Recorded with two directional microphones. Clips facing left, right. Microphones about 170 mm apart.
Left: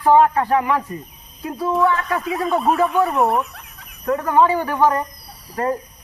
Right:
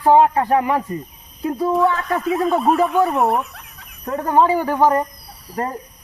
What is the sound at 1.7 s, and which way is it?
Speech, centre (ahead or behind).